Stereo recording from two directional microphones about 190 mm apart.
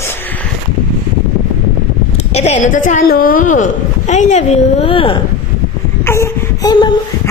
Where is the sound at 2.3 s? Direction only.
35° left (ahead or behind).